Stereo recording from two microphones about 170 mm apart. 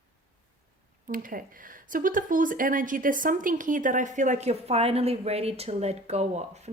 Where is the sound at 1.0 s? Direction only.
55° right (ahead or behind).